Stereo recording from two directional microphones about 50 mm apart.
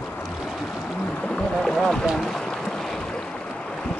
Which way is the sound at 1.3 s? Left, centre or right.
Centre.